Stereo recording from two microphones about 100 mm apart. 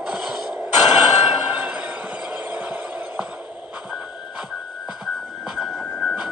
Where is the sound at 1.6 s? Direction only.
10° right (ahead or behind).